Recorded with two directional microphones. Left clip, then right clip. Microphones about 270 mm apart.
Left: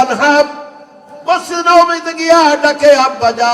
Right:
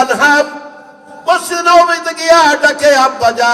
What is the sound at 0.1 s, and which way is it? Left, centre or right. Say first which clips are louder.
A man's voice: even; right.